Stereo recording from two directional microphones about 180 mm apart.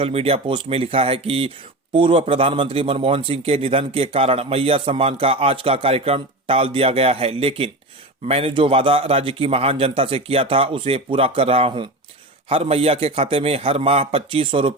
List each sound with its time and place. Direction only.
0.0 s speech: 35° right (ahead or behind)